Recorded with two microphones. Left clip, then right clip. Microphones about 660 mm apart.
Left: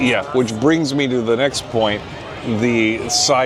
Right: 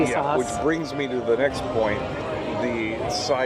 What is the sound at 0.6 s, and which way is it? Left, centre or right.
Speech, left.